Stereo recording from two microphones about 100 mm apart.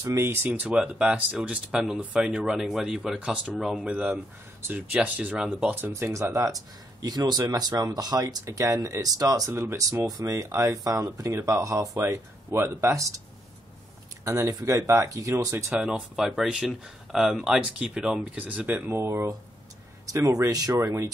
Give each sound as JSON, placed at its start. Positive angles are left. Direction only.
{"t": 0.0, "sound": "speech", "side_deg": -30}
{"t": 0.5, "sound": "speech", "side_deg": -15}
{"t": 14.2, "sound": "speech", "side_deg": -30}
{"t": 15.7, "sound": "speech", "side_deg": -10}
{"t": 18.9, "sound": "speech", "side_deg": -25}